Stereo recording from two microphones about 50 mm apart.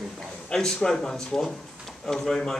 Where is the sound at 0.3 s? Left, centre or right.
Centre.